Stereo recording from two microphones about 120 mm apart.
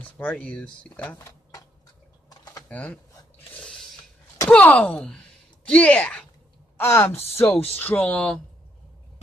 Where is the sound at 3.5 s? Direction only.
5° left (ahead or behind).